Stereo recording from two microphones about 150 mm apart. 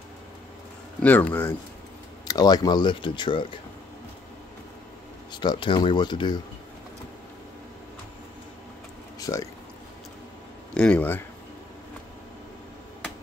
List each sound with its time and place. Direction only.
1.0 s speech: 10° left (ahead or behind)
2.2 s speech: 25° left (ahead or behind)
5.3 s speech: 30° left (ahead or behind)
9.2 s speech: 20° left (ahead or behind)
10.7 s speech: 10° left (ahead or behind)